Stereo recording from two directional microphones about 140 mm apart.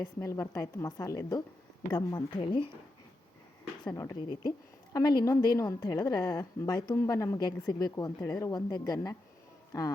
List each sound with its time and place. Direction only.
0.0 s a woman's voice: 20° left (ahead or behind); by 2.6 s 35° left (ahead or behind)
3.9 s a woman's voice: 25° left (ahead or behind)